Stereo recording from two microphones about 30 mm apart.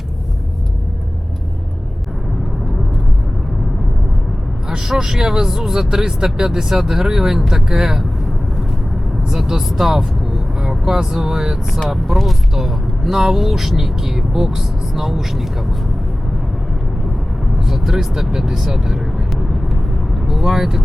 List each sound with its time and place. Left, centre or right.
4.7 s speech: centre
9.5 s speech: centre
17.7 s vehicle: centre
18.1 s speech: centre
19.3 s vehicle: centre
20.2 s speech: centre